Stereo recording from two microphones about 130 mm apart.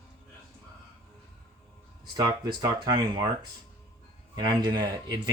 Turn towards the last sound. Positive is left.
turn(degrees=-35)  # may be behind; listen again after turning